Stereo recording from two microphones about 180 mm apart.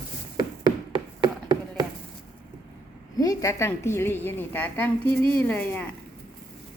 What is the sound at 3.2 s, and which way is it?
A woman's voice, 20° left (ahead or behind).